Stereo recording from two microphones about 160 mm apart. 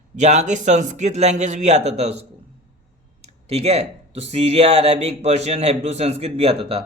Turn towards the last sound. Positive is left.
turn(degrees=-35)  # may be behind; listen again after turning